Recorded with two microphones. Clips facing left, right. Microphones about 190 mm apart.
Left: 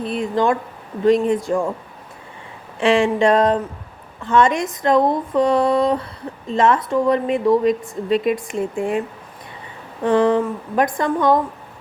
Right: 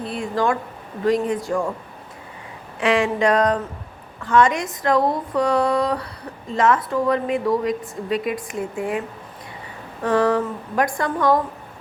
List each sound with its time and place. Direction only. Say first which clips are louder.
0.0 s a woman's voice: left 3 dB; 20° left (ahead or behind)
2.8 s a woman's voice: left 3 dB; 25° left (ahead or behind)
10.0 s a woman's voice: left 3 dB; 20° left (ahead or behind)